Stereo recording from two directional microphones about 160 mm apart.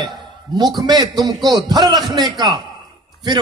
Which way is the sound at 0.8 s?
25° right (ahead or behind).